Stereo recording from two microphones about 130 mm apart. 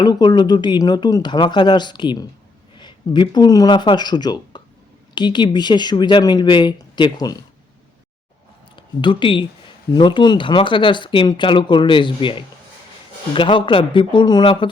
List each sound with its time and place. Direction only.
0.0 s speech: 35° left (ahead or behind)
8.7 s speech: 40° left (ahead or behind)